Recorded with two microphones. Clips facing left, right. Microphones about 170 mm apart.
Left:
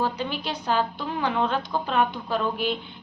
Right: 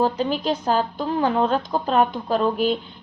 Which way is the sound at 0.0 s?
40° right (ahead or behind).